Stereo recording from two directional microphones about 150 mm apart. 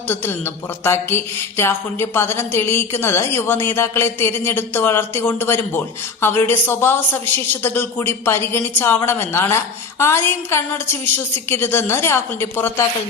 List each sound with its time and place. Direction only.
0.1 s speech: 15° left (ahead or behind)